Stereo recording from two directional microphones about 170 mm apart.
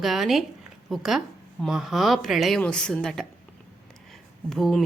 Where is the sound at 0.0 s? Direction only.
Centre (ahead or behind).